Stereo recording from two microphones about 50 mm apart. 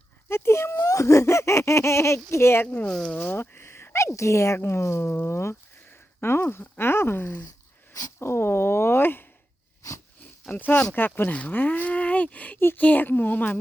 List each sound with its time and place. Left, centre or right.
0.3 s a sound: left
2.8 s speech: centre
3.2 s speech: left
5.1 s speech: left
8.2 s speech: left
10.5 s speech: left
11.3 s a woman's voice: left